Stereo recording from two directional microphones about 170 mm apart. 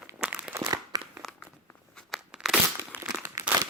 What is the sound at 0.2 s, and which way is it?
Crumpling, 5° right (ahead or behind).